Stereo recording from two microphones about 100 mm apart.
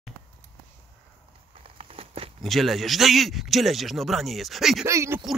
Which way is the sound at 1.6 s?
80° right.